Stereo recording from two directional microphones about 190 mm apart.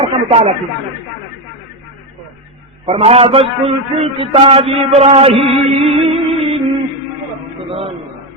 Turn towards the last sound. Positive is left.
turn(degrees=-30)  # may be behind; listen again after turning